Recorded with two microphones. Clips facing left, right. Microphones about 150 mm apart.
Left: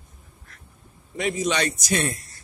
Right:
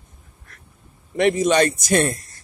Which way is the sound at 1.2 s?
60° right (ahead or behind).